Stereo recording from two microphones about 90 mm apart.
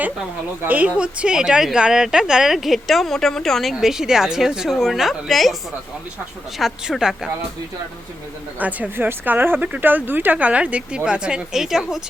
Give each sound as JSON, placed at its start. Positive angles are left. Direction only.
{"t": 0.6, "sound": "speech", "side_deg": -20}
{"t": 6.6, "sound": "speech", "side_deg": 0}
{"t": 8.5, "sound": "speech", "side_deg": -15}